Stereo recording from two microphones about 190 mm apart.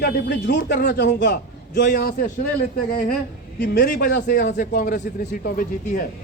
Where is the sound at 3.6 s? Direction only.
50° left (ahead or behind).